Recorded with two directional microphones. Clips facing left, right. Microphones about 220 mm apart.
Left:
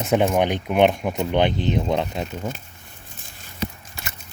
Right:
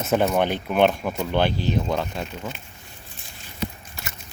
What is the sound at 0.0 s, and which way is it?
Speech, 15° left (ahead or behind).